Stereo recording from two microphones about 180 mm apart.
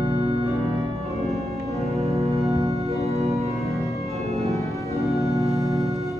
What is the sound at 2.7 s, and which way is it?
Organ, 35° right (ahead or behind).